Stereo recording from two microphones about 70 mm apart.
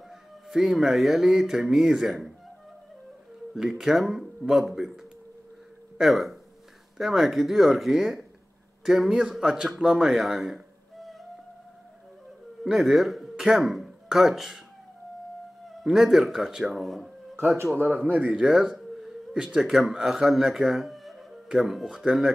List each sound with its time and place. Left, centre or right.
0.1 s speech: centre
3.5 s a man's voice: centre
12.6 s speech: centre
15.7 s speech: centre
17.9 s speech: right
18.2 s a sound: centre
19.6 s speech: centre